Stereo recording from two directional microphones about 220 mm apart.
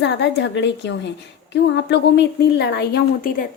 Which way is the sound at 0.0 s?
55° left (ahead or behind).